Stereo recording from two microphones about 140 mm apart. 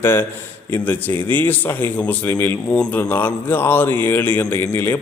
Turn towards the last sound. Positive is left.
turn(degrees=15)  # may be behind; listen again after turning